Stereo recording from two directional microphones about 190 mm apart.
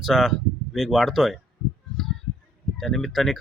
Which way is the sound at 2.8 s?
Centre (ahead or behind).